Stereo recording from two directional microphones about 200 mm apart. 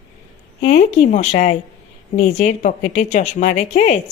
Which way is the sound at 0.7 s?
35° left (ahead or behind).